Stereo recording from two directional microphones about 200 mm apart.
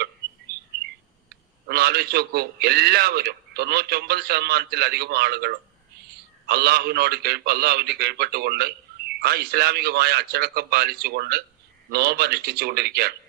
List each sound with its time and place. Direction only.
1.6 s a man's voice: 55° right (ahead or behind)